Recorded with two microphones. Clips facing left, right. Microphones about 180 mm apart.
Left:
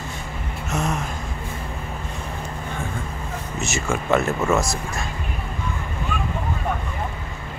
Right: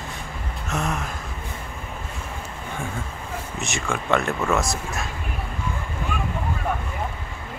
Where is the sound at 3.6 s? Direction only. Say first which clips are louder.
Left 4 dB; 5° left (ahead or behind).